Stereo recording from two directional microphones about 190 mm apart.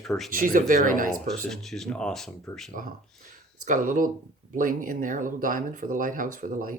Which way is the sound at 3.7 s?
45° right (ahead or behind).